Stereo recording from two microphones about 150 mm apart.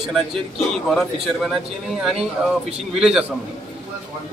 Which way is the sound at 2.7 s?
5° right (ahead or behind).